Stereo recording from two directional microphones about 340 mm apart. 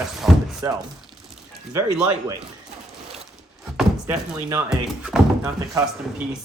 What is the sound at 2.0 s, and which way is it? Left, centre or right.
Speech, centre.